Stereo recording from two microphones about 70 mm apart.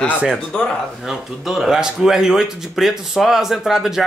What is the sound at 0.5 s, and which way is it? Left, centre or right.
Speech, centre.